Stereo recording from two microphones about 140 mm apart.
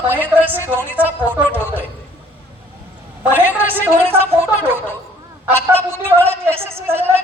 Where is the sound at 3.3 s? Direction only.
10° right (ahead or behind).